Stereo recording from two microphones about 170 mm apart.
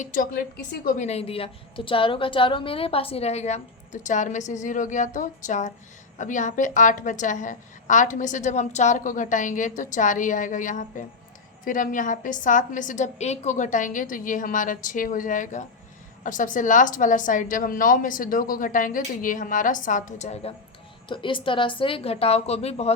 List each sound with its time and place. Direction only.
0.0 s a woman's voice: 50° left (ahead or behind)
0.9 s a woman's voice: 40° left (ahead or behind)
21.1 s a woman's voice: 30° left (ahead or behind)